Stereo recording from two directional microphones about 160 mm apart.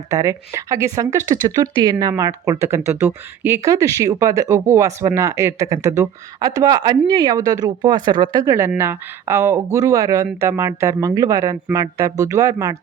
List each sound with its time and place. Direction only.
0.1 s speech: 20° right (ahead or behind)